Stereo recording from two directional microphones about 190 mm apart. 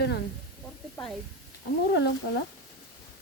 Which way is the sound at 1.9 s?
70° left (ahead or behind).